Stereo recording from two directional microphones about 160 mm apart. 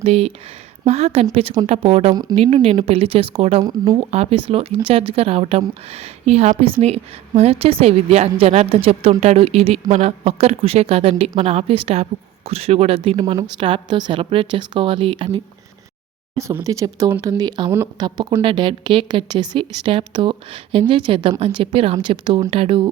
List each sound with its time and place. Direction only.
0.0 s a woman's voice: 40° right (ahead or behind)
3.6 s speech: 25° right (ahead or behind)
4.1 s a woman's voice: 40° right (ahead or behind)
16.4 s a woman's voice: 20° right (ahead or behind); by 22.9 s 35° right (ahead or behind)